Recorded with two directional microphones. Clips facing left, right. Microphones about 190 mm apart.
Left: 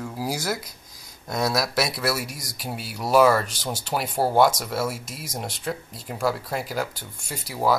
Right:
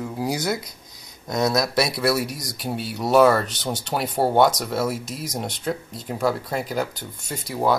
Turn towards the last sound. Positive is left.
turn(degrees=5)  # may be behind; listen again after turning